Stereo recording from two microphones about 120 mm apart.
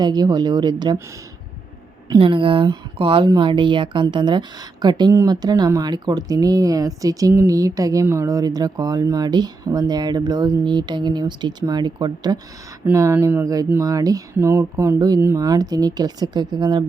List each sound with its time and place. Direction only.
0.0 s speech: 35° right (ahead or behind)
2.0 s speech: 40° right (ahead or behind)
12.8 s speech: 25° right (ahead or behind)